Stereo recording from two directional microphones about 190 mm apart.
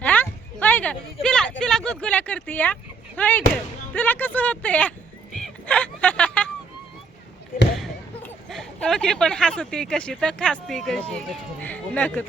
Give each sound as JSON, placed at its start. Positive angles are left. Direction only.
{"t": 0.0, "sound": "speech", "side_deg": 10}
{"t": 3.9, "sound": "a sound", "side_deg": 10}
{"t": 8.2, "sound": "speech", "side_deg": 5}